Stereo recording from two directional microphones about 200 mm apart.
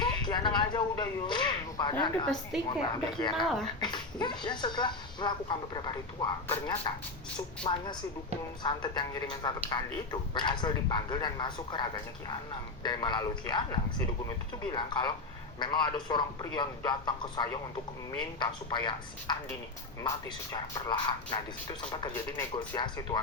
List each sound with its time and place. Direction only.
0.0 s speech: 20° left (ahead or behind)
2.2 s a woman's voice: centre (ahead or behind)
2.6 s speech: 20° left (ahead or behind)
3.3 s a woman's voice: centre (ahead or behind)
3.8 s speech: 20° left (ahead or behind)